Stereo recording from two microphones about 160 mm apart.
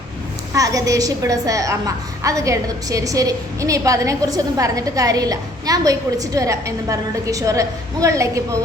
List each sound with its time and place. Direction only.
0.5 s a woman's voice: 20° right (ahead or behind)